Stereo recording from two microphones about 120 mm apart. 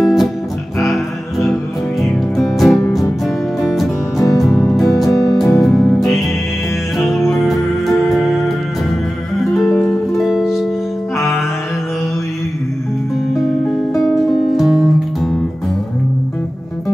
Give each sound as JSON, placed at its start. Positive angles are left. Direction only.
{"t": 0.0, "sound": "music", "side_deg": 0}
{"t": 1.5, "sound": "music", "side_deg": 0}
{"t": 7.8, "sound": "music", "side_deg": 0}
{"t": 9.5, "sound": "music", "side_deg": 0}
{"t": 14.0, "sound": "music", "side_deg": 0}